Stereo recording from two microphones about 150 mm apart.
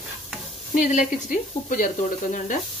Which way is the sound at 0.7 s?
60° left (ahead or behind).